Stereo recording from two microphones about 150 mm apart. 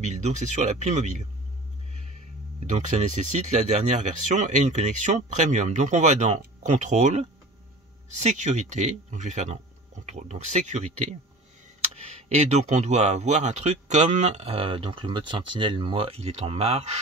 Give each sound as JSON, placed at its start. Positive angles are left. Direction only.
{"t": 0.0, "sound": "speech", "side_deg": -50}
{"t": 2.6, "sound": "speech", "side_deg": -55}
{"t": 11.9, "sound": "speech", "side_deg": -45}